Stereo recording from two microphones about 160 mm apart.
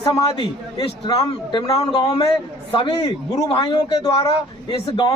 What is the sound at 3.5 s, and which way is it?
A man's voice, 30° left (ahead or behind).